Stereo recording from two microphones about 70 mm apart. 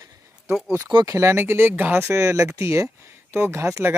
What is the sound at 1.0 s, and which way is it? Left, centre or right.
Speech, right.